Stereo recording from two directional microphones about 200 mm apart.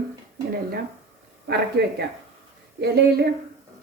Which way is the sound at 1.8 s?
55° right (ahead or behind).